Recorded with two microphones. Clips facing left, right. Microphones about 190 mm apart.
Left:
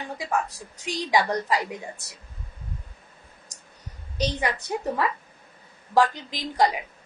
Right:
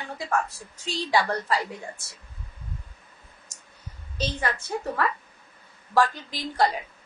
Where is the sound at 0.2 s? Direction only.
15° left (ahead or behind).